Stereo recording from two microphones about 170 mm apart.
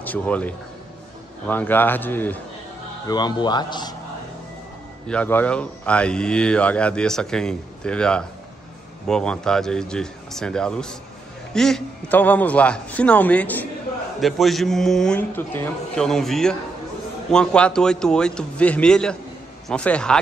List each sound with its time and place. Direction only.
0.0 s a man's voice: 10° left (ahead or behind)
3.1 s speech: 25° left (ahead or behind)
5.0 s a man's voice: 10° left (ahead or behind)